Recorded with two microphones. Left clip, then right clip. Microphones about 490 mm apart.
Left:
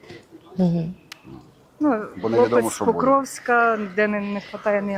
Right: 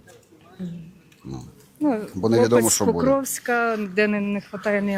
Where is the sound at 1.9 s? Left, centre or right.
Right.